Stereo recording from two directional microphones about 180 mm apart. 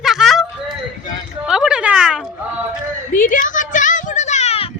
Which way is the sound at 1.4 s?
5° right (ahead or behind).